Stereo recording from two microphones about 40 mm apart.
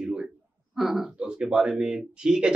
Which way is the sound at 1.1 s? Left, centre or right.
Right.